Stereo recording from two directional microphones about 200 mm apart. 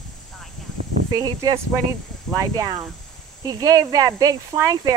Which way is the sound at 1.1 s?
20° right (ahead or behind).